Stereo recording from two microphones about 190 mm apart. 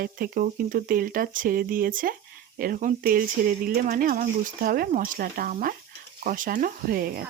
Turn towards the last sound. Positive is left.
turn(degrees=-50)  # may be behind; listen again after turning